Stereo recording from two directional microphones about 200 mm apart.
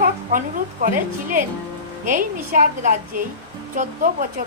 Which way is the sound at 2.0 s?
40° right (ahead or behind).